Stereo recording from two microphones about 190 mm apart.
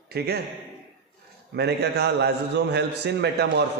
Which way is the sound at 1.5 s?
60° right (ahead or behind).